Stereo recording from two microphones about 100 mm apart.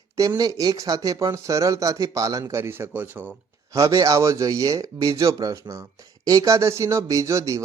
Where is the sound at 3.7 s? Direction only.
35° right (ahead or behind).